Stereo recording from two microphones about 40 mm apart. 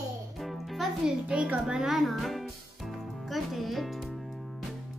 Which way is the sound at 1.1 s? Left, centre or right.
Right.